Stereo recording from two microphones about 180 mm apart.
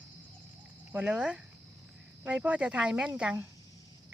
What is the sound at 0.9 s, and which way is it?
Speech, 5° right (ahead or behind).